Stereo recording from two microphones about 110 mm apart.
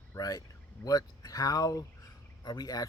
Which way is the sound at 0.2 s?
30° left (ahead or behind).